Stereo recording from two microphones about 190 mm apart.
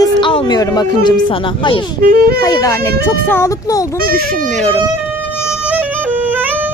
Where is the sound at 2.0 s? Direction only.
50° right (ahead or behind).